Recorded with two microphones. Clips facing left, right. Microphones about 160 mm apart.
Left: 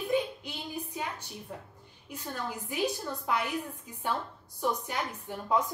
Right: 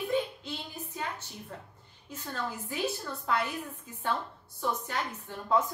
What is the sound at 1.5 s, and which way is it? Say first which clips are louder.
A woman's voice: left 2 dB; 15° left (ahead or behind).